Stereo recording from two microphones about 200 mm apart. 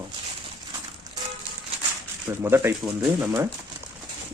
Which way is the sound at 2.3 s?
10° right (ahead or behind).